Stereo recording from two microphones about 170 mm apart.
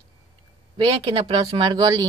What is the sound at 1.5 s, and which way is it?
Speech, 20° right (ahead or behind).